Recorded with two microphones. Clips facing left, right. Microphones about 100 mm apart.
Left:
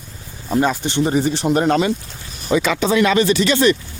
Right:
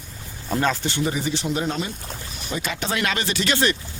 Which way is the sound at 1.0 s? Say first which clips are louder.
Left 7 dB; 40° left (ahead or behind).